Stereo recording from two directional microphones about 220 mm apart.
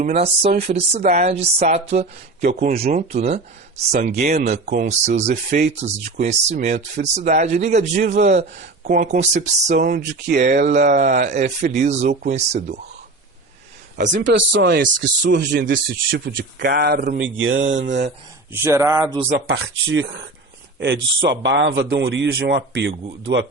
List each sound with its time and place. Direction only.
0.0 s speech: 30° right (ahead or behind)
8.8 s speech: 45° right (ahead or behind)
9.0 s speech: 30° right (ahead or behind)
14.0 s speech: 35° right (ahead or behind)
14.3 s speech: 55° right (ahead or behind); by 15.8 s 40° right (ahead or behind)
16.0 s speech: 55° right (ahead or behind)
17.2 s a sound: 60° right (ahead or behind)
18.5 s speech: 10° right (ahead or behind)
19.5 s speech: 50° right (ahead or behind)
23.2 s a sound: 55° right (ahead or behind)